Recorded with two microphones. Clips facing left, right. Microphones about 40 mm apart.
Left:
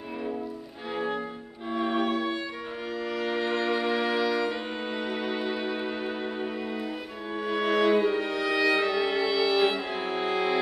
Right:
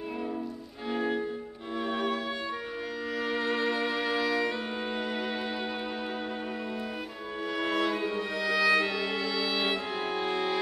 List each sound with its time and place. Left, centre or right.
0.8 s music: centre
2.0 s violin: centre
3.1 s music: centre
7.4 s music: centre